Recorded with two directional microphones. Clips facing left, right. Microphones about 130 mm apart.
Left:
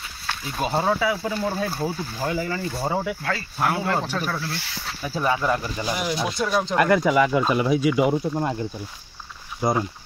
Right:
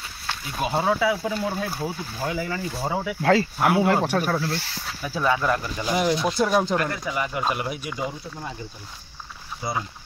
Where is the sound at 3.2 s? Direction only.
90° right.